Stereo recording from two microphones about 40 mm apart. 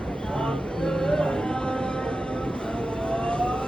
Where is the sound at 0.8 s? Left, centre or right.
Centre.